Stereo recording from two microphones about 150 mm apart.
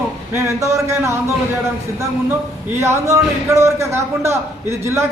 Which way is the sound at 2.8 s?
20° right (ahead or behind).